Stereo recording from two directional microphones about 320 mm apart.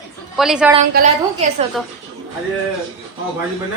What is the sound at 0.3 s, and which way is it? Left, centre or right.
Speech, centre.